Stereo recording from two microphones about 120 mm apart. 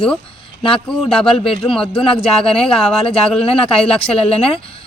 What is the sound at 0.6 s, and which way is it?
Speech, 45° left (ahead or behind).